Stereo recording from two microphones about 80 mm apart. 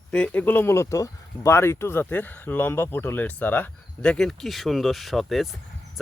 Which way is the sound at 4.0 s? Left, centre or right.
Centre.